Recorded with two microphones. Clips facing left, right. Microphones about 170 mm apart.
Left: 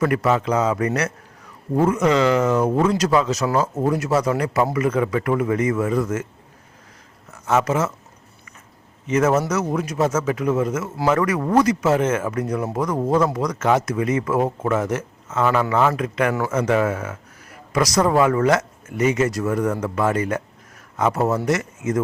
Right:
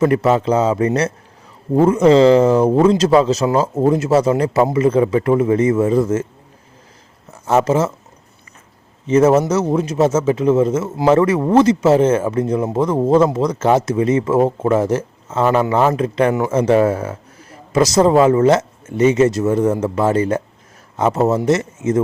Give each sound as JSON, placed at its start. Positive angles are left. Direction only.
{"t": 0.0, "sound": "speech", "side_deg": -25}
{"t": 7.4, "sound": "speech", "side_deg": -30}
{"t": 9.0, "sound": "speech", "side_deg": -30}